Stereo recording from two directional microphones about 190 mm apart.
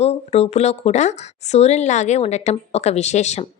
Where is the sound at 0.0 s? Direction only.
35° left (ahead or behind).